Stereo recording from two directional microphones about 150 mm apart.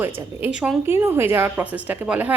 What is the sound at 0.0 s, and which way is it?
A woman's voice, 10° right (ahead or behind).